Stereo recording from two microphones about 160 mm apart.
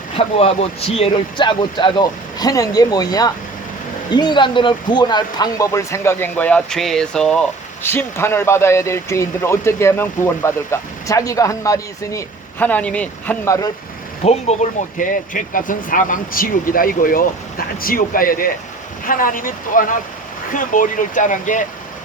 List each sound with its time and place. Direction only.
0.2 s speech: 35° left (ahead or behind); by 7.4 s 5° left (ahead or behind)
7.8 s speech: 15° left (ahead or behind)
14.3 s speech: 45° left (ahead or behind)